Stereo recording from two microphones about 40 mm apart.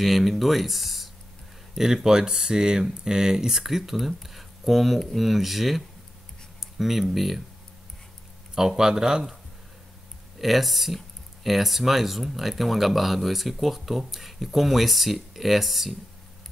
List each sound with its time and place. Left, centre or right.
0.0 s speech: centre
1.8 s speech: centre
8.5 s speech: centre
10.4 s speech: centre